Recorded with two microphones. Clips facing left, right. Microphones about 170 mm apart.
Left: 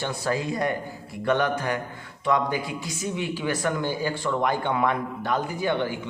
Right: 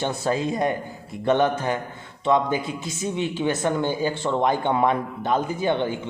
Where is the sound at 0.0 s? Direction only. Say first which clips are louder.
Right 3 dB; 25° right (ahead or behind).